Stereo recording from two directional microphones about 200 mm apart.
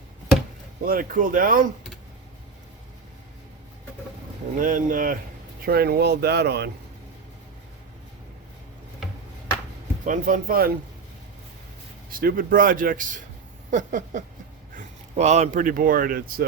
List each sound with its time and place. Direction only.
0.9 s a man's voice: 45° right (ahead or behind)
4.6 s a man's voice: 40° right (ahead or behind)
10.1 s a man's voice: 45° right (ahead or behind)
12.1 s a man's voice: 45° right (ahead or behind)
13.7 s a sound: 40° right (ahead or behind)
14.8 s speech: 35° right (ahead or behind)